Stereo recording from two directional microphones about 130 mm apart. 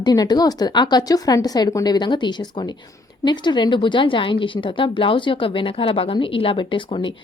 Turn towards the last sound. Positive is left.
turn(degrees=40)  # may be behind; listen again after turning